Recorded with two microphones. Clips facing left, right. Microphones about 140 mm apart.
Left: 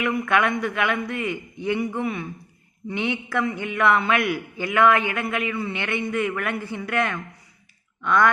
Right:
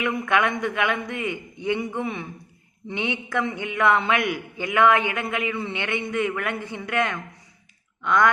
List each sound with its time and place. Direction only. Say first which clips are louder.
0.0 s a man's voice: left 1 dB; 20° right (ahead or behind)